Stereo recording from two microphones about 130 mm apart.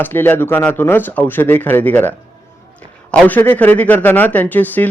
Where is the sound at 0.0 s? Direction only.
15° left (ahead or behind).